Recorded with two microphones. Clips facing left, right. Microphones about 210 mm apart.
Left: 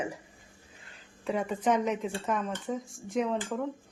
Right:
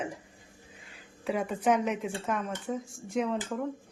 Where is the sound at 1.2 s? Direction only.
5° right (ahead or behind).